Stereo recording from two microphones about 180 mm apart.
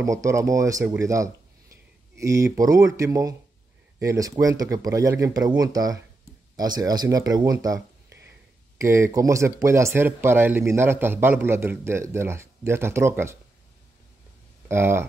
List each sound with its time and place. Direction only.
0.0 s speech: 15° right (ahead or behind)
8.1 s a sound: 70° right (ahead or behind)
8.7 s speech: 15° right (ahead or behind)
14.7 s speech: 15° right (ahead or behind)